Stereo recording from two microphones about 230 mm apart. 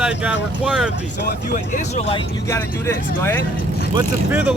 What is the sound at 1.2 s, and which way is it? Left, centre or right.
Speech, left.